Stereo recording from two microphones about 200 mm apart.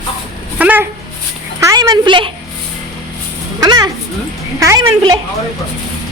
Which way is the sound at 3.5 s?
20° right (ahead or behind).